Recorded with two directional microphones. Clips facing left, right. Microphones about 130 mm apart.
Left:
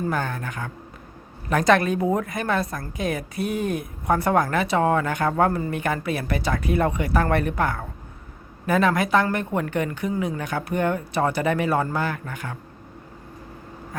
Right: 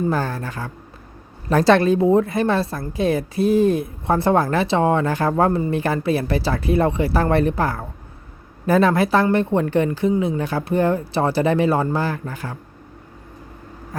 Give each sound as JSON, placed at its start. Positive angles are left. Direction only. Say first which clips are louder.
{"t": 0.1, "sound": "a woman's voice", "louder": "right 4 dB", "side_deg": -35}